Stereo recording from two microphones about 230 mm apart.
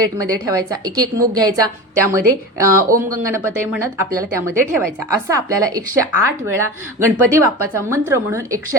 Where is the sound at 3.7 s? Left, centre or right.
Centre.